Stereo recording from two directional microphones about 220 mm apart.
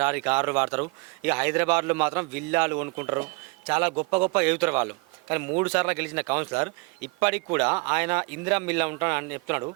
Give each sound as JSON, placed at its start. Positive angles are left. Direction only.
{"t": 0.0, "sound": "a man's voice", "side_deg": -10}